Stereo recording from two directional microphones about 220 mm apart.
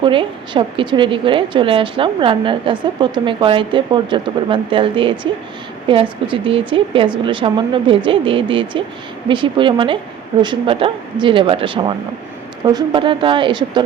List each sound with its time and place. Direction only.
0.0 s a woman's voice: 20° right (ahead or behind)